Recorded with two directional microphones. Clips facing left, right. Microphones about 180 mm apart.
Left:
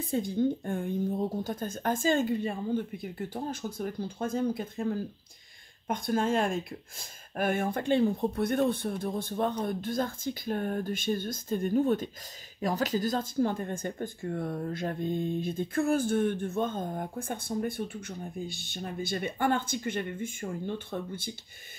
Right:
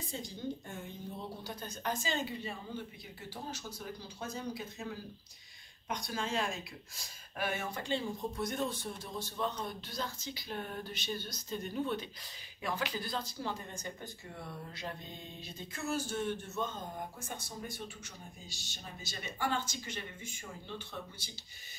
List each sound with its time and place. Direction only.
0.0 s speech: 55° left (ahead or behind)